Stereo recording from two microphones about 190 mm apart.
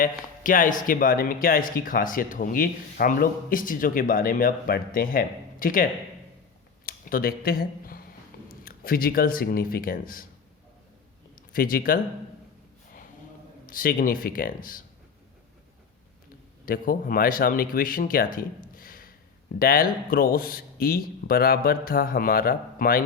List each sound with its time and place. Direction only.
0.0 s speech: 45° left (ahead or behind)
6.8 s a sound: 50° left (ahead or behind)
8.4 s speech: 50° left (ahead or behind)
11.5 s speech: 50° left (ahead or behind)
13.7 s speech: 50° left (ahead or behind)
16.6 s speech: 50° left (ahead or behind)